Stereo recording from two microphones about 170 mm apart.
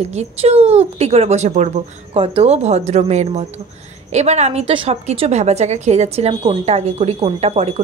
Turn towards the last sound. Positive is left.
turn(degrees=-40)  # may be behind; listen again after turning